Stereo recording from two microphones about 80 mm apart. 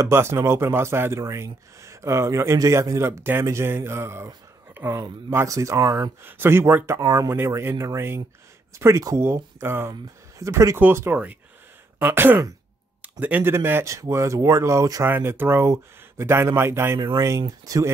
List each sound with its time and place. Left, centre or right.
0.1 s speech: right
6.2 s speech: right
7.0 s speech: right
7.3 s speech: right
10.8 s speech: right
13.8 s speech: right
15.0 s speech: right
17.4 s speech: right